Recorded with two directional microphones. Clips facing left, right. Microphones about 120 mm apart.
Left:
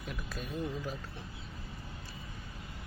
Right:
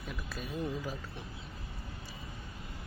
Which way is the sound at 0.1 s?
Centre (ahead or behind).